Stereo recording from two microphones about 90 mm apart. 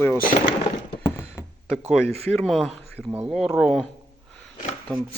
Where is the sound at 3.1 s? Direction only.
15° right (ahead or behind).